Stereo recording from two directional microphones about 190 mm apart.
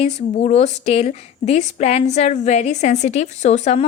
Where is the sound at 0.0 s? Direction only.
35° left (ahead or behind).